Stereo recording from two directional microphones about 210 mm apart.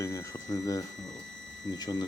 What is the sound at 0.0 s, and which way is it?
Speech, 15° left (ahead or behind).